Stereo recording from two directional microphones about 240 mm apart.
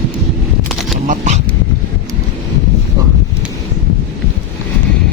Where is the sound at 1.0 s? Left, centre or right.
Right.